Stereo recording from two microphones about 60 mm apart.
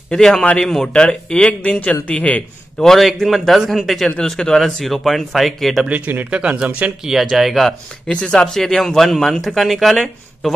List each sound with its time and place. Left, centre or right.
0.1 s speech: centre
2.8 s speech: centre
5.9 s speech: right
7.1 s speech: centre
8.1 s speech: centre